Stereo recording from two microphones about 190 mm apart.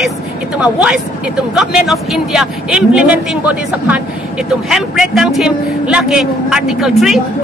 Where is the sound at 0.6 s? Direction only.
5° right (ahead or behind).